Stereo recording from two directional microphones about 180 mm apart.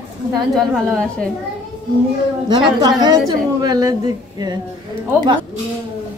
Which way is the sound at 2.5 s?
20° right (ahead or behind).